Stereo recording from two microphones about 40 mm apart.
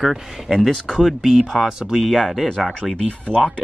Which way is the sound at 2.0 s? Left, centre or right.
Centre.